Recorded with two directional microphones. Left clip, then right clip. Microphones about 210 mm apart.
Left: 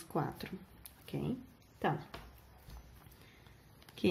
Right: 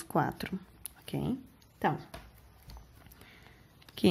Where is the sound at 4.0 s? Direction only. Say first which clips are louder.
Right 5 dB; 40° right (ahead or behind).